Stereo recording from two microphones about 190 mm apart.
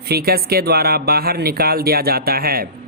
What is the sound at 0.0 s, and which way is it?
A man's voice, 55° right (ahead or behind).